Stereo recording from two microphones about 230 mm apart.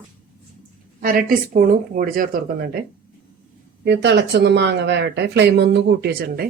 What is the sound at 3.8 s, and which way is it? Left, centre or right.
Speech, right.